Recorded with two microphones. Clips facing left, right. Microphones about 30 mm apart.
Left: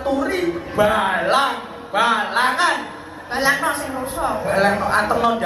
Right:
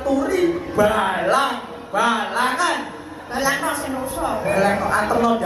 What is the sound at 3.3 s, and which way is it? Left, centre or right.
Speech, left.